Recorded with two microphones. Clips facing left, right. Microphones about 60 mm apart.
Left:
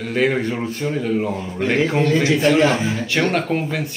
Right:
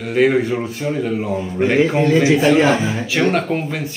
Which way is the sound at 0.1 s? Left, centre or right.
Centre.